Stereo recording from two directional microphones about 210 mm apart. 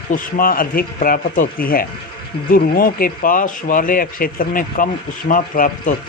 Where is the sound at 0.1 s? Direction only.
40° left (ahead or behind).